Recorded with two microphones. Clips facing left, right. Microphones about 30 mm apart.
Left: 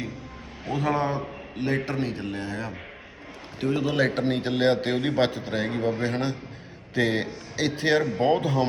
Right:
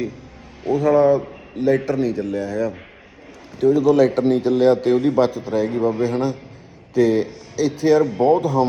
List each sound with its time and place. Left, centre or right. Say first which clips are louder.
0.7 s a man's voice: right 11 dB; left